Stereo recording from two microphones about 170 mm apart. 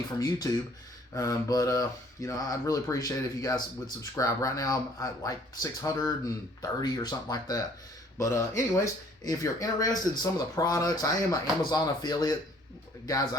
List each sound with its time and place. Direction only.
0.2 s speech: 20° left (ahead or behind)